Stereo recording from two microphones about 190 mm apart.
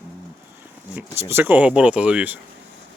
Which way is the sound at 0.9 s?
10° right (ahead or behind).